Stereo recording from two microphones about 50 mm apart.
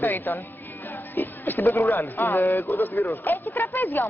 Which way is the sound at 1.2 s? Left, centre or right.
Left.